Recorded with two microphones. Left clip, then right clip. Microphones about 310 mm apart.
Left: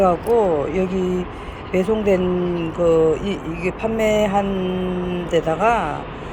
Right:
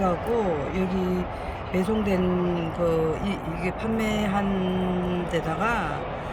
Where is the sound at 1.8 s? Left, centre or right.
Centre.